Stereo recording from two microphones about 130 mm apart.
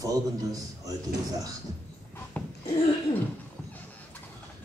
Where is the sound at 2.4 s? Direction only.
10° left (ahead or behind).